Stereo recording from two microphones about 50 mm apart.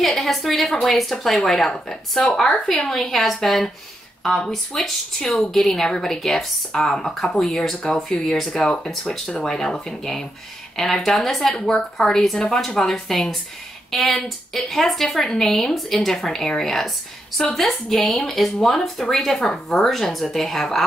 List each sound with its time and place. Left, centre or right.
0.0 s a woman's voice: centre
9.0 s a woman's voice: centre